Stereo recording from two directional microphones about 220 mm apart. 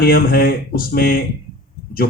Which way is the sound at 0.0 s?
40° left (ahead or behind).